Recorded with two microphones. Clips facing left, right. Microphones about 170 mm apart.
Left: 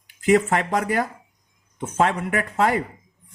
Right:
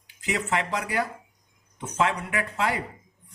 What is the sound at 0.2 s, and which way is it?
Speech, 50° left (ahead or behind).